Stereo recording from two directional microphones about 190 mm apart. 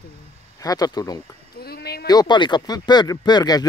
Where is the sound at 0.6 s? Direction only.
20° left (ahead or behind).